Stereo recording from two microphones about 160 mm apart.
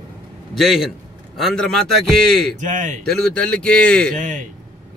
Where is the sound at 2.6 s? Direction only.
50° right (ahead or behind).